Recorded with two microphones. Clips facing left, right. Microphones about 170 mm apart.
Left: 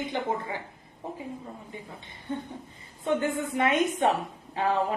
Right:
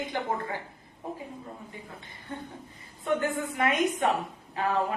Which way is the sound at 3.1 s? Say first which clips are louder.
Left 1 dB; 25° left (ahead or behind).